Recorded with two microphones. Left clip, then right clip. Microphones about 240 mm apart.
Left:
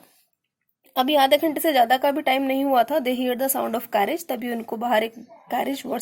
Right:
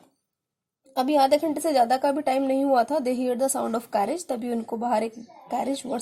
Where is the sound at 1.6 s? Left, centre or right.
Left.